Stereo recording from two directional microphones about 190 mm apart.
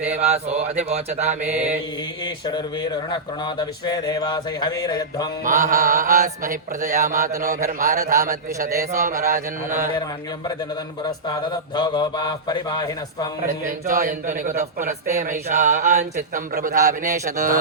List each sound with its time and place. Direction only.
0.1 s chant: 35° right (ahead or behind)
2.2 s speech: 25° left (ahead or behind)
5.5 s a man's voice: 40° right (ahead or behind)
11.0 s speech: 20° left (ahead or behind)
13.4 s a man's voice: 45° right (ahead or behind)